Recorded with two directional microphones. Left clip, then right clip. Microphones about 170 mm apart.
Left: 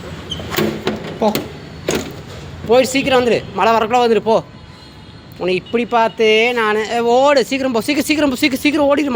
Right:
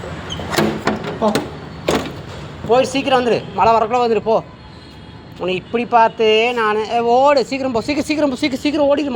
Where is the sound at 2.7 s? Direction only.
40° left (ahead or behind).